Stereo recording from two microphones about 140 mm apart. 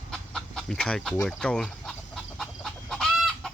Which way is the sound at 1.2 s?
5° left (ahead or behind).